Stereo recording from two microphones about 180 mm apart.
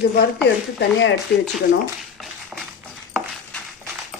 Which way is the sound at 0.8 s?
90° left.